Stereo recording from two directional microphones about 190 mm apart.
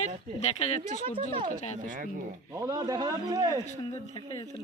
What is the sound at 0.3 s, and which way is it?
Speech, 35° left (ahead or behind).